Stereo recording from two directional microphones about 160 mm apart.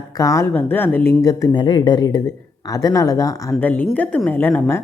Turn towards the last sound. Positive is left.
turn(degrees=10)  # may be behind; listen again after turning